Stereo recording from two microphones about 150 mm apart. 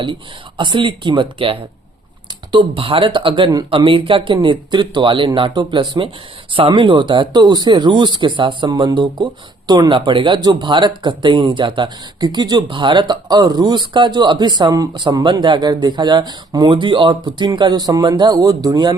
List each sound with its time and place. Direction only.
0.0 s speech: 35° right (ahead or behind)